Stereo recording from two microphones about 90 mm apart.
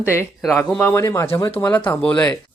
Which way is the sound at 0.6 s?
15° left (ahead or behind).